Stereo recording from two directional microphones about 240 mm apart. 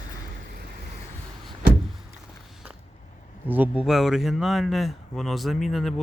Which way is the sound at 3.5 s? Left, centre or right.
Centre.